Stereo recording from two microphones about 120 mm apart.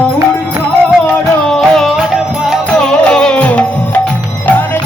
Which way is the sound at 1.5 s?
5° left (ahead or behind).